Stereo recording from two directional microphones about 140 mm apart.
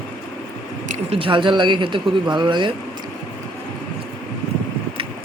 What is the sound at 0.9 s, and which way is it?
Speech, 45° right (ahead or behind).